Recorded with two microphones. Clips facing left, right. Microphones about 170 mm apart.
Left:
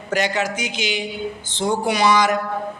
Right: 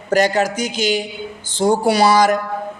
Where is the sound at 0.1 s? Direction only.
40° right (ahead or behind).